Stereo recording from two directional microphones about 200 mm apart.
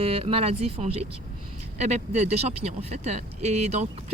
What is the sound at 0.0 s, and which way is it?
Speech, 30° right (ahead or behind).